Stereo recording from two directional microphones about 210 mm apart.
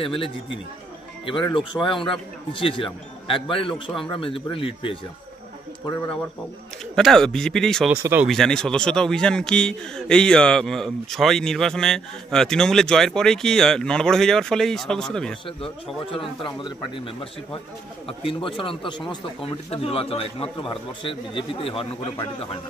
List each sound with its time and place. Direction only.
0.0 s speech: 25° left (ahead or behind)
7.0 s a man's voice: centre (ahead or behind)
7.9 s speech: 10° right (ahead or behind)
8.3 s a man's voice: centre (ahead or behind)
15.4 s speech: 25° left (ahead or behind)